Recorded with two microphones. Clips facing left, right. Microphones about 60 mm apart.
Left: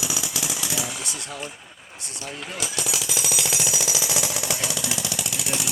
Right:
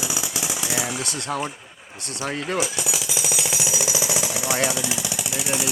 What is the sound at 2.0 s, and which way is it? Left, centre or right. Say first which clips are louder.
Speech: right 8 dB; right.